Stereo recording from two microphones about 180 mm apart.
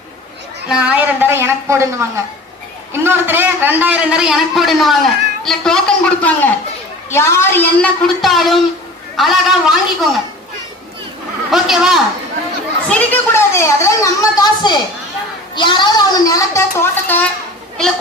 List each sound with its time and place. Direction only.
0.7 s a woman's voice: 10° right (ahead or behind)
11.5 s a man's voice: centre (ahead or behind)
12.9 s a woman's voice: 10° left (ahead or behind)